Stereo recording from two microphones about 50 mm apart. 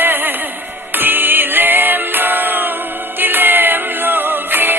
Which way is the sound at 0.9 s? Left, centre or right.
Right.